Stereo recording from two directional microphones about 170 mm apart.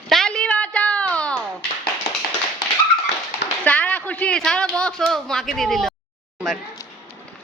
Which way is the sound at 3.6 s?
10° left (ahead or behind).